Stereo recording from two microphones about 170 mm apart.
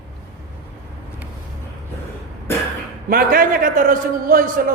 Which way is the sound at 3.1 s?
55° right (ahead or behind).